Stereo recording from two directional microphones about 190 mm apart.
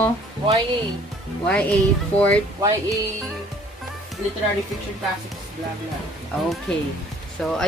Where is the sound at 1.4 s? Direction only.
5° left (ahead or behind).